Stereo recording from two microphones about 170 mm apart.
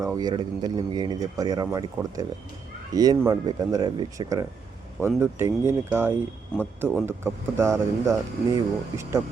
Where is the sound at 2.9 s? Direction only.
20° right (ahead or behind).